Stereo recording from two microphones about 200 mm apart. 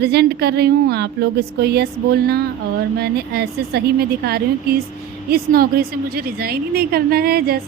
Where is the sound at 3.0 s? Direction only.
55° right (ahead or behind).